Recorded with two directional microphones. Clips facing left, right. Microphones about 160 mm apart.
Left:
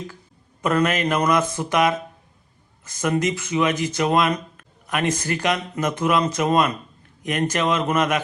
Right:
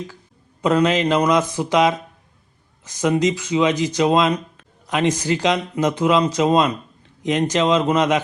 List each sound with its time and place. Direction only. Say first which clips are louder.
0.6 s speech: right 3 dB; 15° right (ahead or behind)